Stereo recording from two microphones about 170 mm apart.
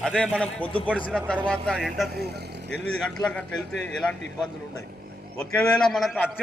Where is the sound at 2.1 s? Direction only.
70° right (ahead or behind).